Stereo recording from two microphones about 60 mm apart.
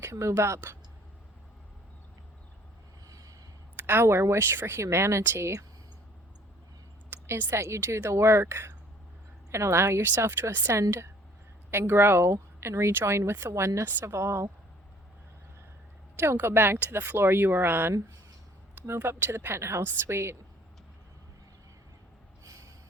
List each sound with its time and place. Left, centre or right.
0.1 s speech: right
0.3 s speech: right
3.1 s vehicle: right
3.8 s speech: right
5.2 s speech: right
7.1 s speech: right
16.1 s speech: right